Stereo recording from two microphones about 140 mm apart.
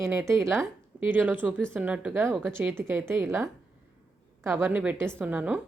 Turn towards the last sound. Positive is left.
turn(degrees=-10)  # may be behind; listen again after turning